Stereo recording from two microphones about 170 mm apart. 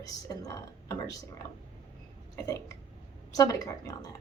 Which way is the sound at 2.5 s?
20° left (ahead or behind).